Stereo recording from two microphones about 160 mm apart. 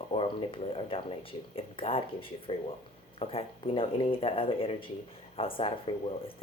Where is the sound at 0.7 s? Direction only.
35° left (ahead or behind).